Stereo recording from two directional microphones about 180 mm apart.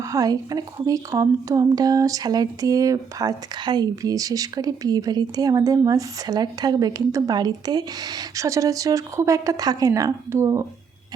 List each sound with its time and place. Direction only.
0.0 s a woman's voice: 20° right (ahead or behind)